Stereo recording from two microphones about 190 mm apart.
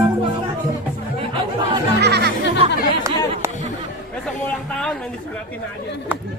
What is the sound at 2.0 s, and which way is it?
Music, 60° right (ahead or behind).